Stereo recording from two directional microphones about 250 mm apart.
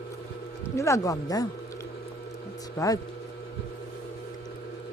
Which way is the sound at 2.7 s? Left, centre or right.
Centre.